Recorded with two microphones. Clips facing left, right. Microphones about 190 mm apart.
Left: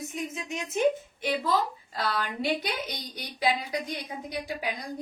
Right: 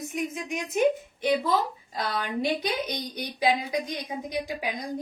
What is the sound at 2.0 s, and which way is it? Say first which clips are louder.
A woman's voice: right 2 dB; 20° right (ahead or behind).